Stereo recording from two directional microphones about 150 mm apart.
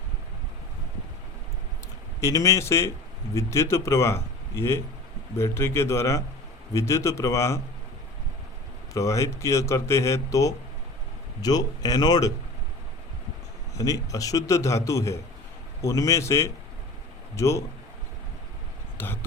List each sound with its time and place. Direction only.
2.2 s a man's voice: 20° left (ahead or behind)
8.9 s a man's voice: 20° left (ahead or behind)
13.7 s a man's voice: 20° left (ahead or behind)
18.9 s speech: 15° left (ahead or behind)